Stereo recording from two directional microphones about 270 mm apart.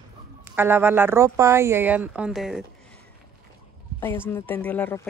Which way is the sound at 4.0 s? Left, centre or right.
Centre.